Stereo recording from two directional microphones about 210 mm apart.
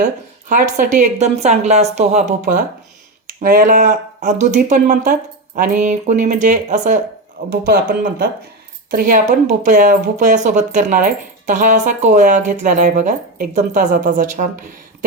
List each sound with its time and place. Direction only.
0.0 s speech: 35° right (ahead or behind)
7.5 s speech: 50° right (ahead or behind)